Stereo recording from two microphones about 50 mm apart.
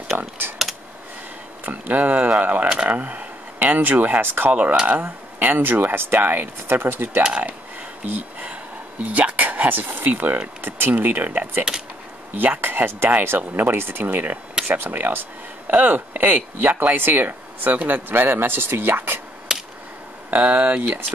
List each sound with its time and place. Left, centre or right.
0.1 s speech: right
1.7 s speech: right
4.5 s speech: right
7.2 s speech: right
8.0 s a sound: right
10.1 s speech: right
18.1 s speech: right
19.5 s a sound: centre
20.2 s speech: right